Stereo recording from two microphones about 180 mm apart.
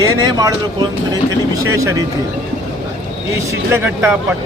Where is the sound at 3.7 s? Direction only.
10° right (ahead or behind).